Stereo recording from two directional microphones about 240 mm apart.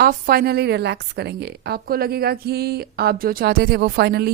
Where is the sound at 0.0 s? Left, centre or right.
Right.